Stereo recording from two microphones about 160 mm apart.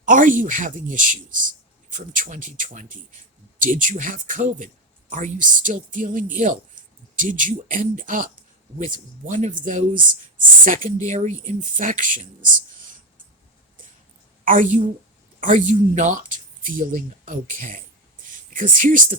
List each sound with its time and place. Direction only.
0.0 s speech: 55° right (ahead or behind)
14.4 s a woman's voice: 55° right (ahead or behind)